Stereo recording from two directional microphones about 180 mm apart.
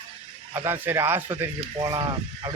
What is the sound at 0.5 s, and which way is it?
Speech, 15° right (ahead or behind).